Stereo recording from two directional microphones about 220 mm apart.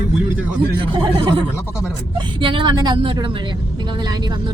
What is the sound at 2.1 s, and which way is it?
Speech, 25° right (ahead or behind).